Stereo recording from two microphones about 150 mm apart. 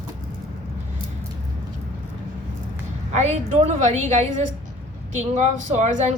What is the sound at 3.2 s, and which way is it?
Speech, 50° right (ahead or behind).